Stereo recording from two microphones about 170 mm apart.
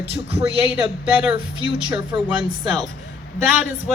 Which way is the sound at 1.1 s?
10° right (ahead or behind).